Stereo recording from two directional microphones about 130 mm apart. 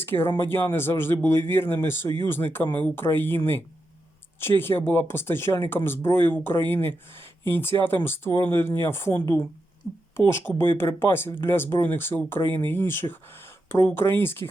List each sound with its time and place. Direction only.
0.0 s speech: 15° left (ahead or behind)